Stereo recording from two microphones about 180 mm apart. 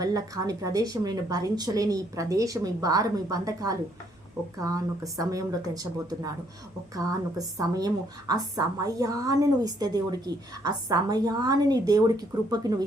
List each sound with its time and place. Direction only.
0.0 s a woman's voice: 20° right (ahead or behind)